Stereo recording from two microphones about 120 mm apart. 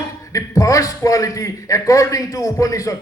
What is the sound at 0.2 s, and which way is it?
A man's voice, 30° left (ahead or behind).